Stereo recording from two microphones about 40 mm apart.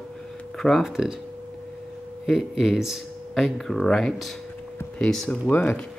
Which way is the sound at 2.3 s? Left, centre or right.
Centre.